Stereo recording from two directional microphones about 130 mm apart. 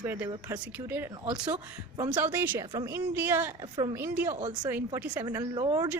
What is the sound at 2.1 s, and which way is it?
A woman's voice, 15° right (ahead or behind).